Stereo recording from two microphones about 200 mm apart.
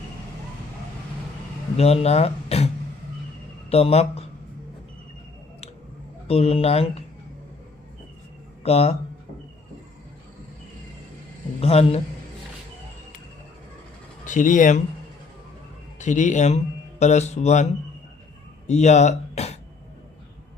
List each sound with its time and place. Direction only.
1.7 s speech: 30° left (ahead or behind)
3.7 s speech: 30° left (ahead or behind)
6.2 s speech: 30° left (ahead or behind)
8.6 s speech: 30° left (ahead or behind)
11.6 s speech: 30° left (ahead or behind)
14.3 s speech: 40° left (ahead or behind)
16.0 s speech: 35° left (ahead or behind)
18.7 s speech: 35° left (ahead or behind)